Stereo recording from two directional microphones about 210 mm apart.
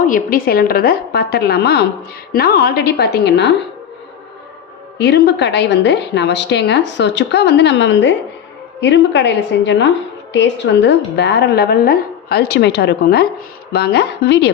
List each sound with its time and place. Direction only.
0.0 s a woman's voice: 40° left (ahead or behind)
4.9 s a woman's voice: 50° left (ahead or behind)